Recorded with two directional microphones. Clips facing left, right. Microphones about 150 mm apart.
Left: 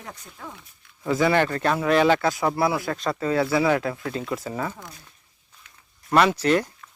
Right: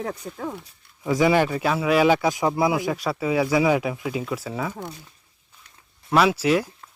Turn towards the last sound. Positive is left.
turn(degrees=-5)  # may be behind; listen again after turning